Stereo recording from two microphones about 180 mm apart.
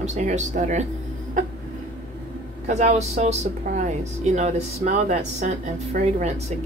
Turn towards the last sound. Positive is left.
turn(degrees=-40)  # may be behind; listen again after turning